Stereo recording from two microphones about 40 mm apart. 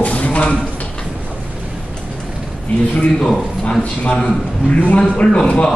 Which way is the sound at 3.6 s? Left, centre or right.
Left.